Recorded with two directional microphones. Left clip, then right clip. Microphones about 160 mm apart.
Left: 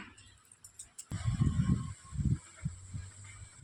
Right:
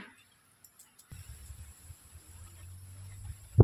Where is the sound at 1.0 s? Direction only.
45° left (ahead or behind).